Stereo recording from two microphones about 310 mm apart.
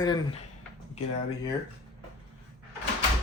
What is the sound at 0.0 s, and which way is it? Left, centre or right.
Speech, centre.